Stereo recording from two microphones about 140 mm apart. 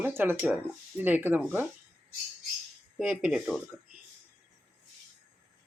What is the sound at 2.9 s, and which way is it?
Speech, 5° right (ahead or behind).